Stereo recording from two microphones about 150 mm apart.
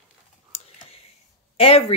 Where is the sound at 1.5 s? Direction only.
40° left (ahead or behind).